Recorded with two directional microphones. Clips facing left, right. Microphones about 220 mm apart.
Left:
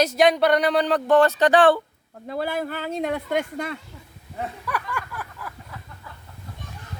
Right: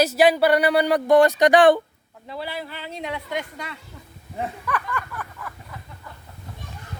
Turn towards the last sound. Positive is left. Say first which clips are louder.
# right 1 dB
turn(degrees=10)  # may be behind; listen again after turning